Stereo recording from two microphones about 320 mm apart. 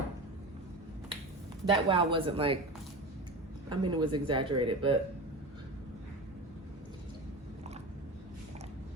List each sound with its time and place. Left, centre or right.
1.6 s speech: centre
3.7 s speech: centre